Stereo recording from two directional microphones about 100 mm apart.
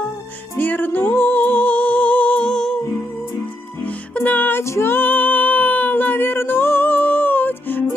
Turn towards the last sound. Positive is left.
turn(degrees=20)  # may be behind; listen again after turning